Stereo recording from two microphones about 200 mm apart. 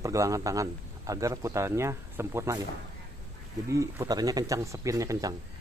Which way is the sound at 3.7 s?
15° right (ahead or behind).